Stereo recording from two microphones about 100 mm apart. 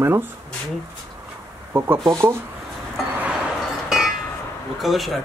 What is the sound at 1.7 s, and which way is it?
Speech, 25° right (ahead or behind).